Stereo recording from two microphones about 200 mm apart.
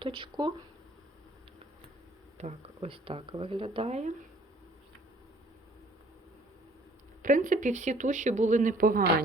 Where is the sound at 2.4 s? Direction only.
30° right (ahead or behind).